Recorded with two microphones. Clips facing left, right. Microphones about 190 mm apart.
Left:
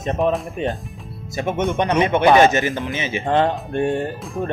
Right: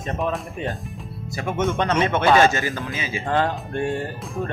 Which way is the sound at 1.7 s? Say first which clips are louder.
Left 3 dB; 15° left (ahead or behind).